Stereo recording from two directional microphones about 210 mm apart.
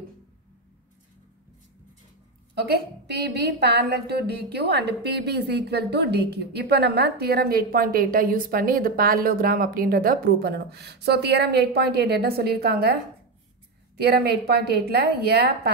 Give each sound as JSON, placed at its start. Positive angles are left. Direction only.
{"t": 3.6, "sound": "a woman's voice", "side_deg": -50}
{"t": 13.9, "sound": "a woman's voice", "side_deg": -50}